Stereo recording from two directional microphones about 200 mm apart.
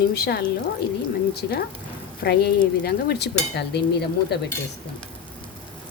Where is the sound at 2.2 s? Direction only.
50° left (ahead or behind).